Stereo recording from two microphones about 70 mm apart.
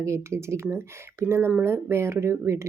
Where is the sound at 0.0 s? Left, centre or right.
Right.